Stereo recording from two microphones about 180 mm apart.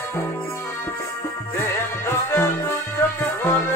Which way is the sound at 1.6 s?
15° left (ahead or behind).